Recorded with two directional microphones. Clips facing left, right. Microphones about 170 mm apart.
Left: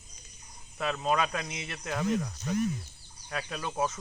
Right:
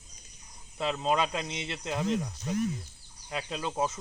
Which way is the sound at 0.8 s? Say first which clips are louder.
Right 1 dB; 20° right (ahead or behind).